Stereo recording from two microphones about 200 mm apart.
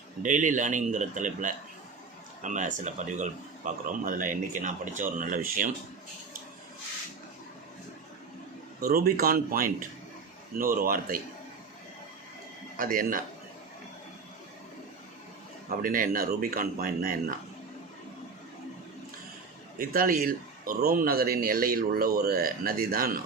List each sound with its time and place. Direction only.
0.2 s speech: 40° right (ahead or behind)
8.8 s speech: 50° right (ahead or behind)
12.7 s speech: 45° right (ahead or behind)
15.8 s speech: 45° right (ahead or behind)
19.8 s speech: 45° right (ahead or behind)